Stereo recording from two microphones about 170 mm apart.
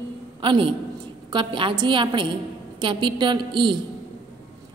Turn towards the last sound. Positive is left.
turn(degrees=-30)  # may be behind; listen again after turning